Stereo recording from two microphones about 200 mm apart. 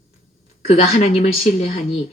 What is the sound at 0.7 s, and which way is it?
Speech, 30° left (ahead or behind).